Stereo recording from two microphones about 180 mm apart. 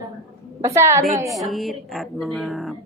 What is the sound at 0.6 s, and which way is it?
Speech, 15° right (ahead or behind).